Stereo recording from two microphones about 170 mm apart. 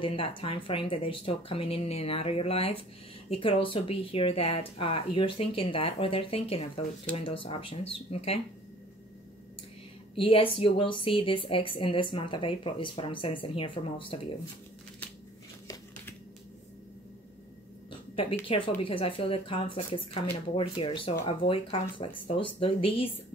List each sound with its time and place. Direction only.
0.0 s a woman's voice: 30° left (ahead or behind)
10.1 s a woman's voice: 30° left (ahead or behind)
15.6 s a sound: 20° left (ahead or behind)
18.5 s a woman's voice: 30° left (ahead or behind)